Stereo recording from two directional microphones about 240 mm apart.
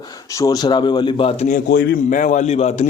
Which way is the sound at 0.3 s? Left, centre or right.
Centre.